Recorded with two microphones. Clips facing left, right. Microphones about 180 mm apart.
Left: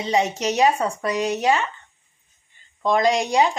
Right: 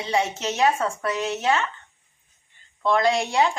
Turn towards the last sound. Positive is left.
turn(degrees=15)  # may be behind; listen again after turning